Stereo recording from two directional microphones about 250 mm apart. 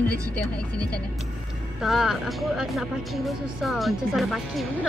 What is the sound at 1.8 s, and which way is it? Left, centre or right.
Speech, centre.